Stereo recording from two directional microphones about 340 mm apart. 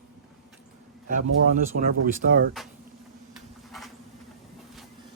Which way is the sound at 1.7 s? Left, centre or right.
Right.